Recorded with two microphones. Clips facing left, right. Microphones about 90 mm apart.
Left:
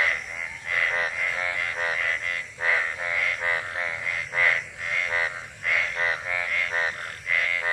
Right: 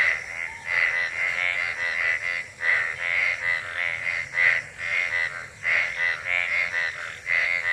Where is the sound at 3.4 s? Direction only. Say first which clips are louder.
Left 2 dB; 45° left (ahead or behind).